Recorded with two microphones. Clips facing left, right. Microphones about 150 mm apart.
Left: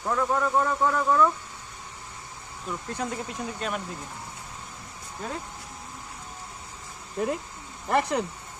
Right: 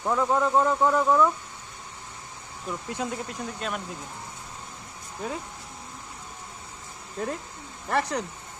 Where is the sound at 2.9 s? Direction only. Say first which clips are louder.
Even; 10° right (ahead or behind).